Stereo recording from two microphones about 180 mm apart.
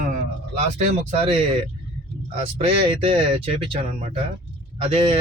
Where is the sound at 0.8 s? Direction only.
35° right (ahead or behind).